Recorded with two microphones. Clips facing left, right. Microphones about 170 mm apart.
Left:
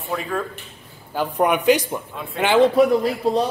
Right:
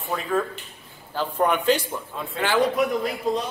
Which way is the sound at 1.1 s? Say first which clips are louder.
Left 3 dB; 15° left (ahead or behind).